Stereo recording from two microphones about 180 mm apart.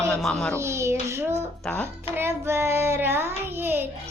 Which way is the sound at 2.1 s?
15° right (ahead or behind).